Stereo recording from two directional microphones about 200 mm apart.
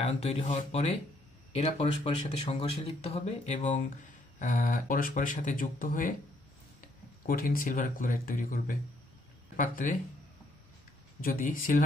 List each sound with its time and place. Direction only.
0.0 s speech: 30° left (ahead or behind)
7.2 s speech: 45° left (ahead or behind)
11.1 s speech: 45° left (ahead or behind)